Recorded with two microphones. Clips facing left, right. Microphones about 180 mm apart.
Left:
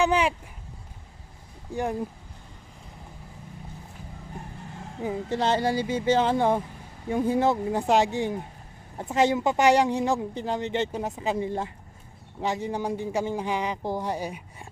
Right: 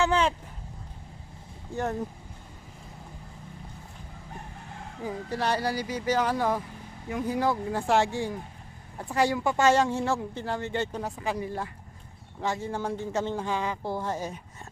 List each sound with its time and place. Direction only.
0.0 s speech: 15° left (ahead or behind)
1.7 s speech: 15° left (ahead or behind)
5.0 s a woman's voice: 20° left (ahead or behind)